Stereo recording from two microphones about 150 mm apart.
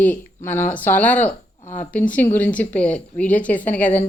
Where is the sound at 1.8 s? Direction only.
10° left (ahead or behind).